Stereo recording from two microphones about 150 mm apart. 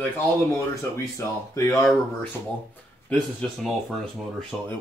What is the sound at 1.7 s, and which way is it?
Speech, centre (ahead or behind).